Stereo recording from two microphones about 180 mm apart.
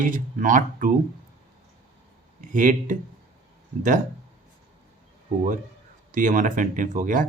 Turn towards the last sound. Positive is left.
turn(degrees=-50)  # may be behind; listen again after turning